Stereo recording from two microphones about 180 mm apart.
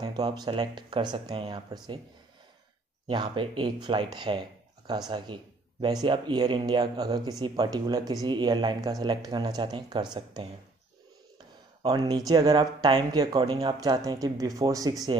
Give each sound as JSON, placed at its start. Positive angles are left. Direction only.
{"t": 0.0, "sound": "speech", "side_deg": -25}
{"t": 3.1, "sound": "speech", "side_deg": -25}
{"t": 11.8, "sound": "speech", "side_deg": -20}